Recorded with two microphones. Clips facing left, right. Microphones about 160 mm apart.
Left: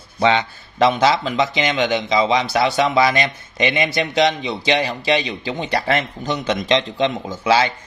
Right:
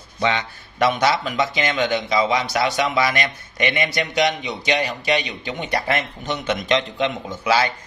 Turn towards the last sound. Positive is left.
turn(degrees=25)  # may be behind; listen again after turning